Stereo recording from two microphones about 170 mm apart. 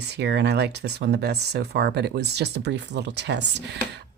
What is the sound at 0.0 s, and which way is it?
Speech, 80° right.